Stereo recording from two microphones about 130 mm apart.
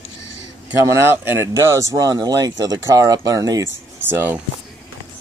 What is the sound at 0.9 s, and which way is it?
Speech, 20° right (ahead or behind).